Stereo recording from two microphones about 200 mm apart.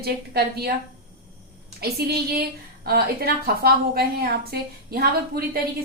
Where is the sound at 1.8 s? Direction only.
50° right (ahead or behind).